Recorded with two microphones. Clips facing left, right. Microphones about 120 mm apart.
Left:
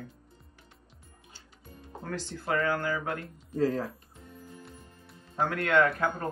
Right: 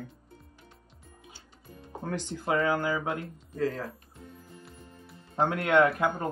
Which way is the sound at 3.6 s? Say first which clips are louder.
Left 3 dB; 30° left (ahead or behind).